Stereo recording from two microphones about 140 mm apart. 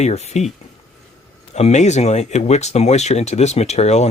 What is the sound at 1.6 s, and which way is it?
Speech, 50° left (ahead or behind).